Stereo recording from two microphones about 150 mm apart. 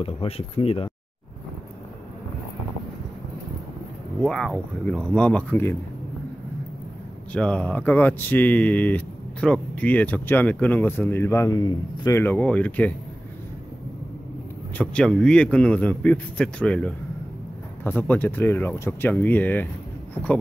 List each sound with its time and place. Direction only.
0.0 s speech: 40° left (ahead or behind)
4.2 s speech: 5° left (ahead or behind)
7.3 s speech: 5° left (ahead or behind)
14.8 s speech: 5° left (ahead or behind)